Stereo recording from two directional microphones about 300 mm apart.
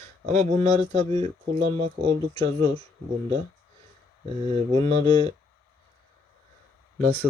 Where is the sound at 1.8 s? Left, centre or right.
Centre.